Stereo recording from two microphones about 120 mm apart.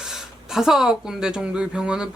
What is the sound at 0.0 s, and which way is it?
Speech, 5° right (ahead or behind).